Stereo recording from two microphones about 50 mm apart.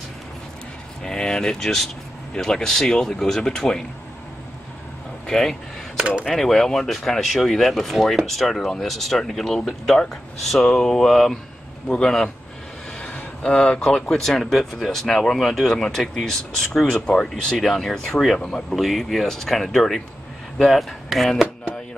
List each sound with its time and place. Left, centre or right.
1.0 s speech: centre
5.2 s speech: centre
5.9 s speech: right
6.2 s speech: centre
13.4 s speech: left
13.7 s speech: centre
18.8 s speech: centre